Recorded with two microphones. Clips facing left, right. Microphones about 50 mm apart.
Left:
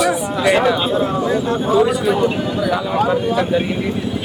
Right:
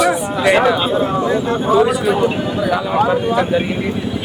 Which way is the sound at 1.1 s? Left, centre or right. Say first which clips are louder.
Right 1 dB; right.